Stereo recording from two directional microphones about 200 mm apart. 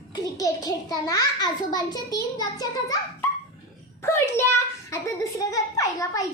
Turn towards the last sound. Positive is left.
turn(degrees=15)  # may be behind; listen again after turning